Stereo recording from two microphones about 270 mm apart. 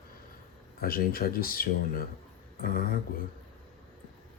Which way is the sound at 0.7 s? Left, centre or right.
Left.